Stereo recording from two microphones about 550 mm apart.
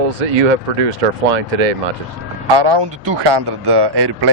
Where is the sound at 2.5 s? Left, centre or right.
Right.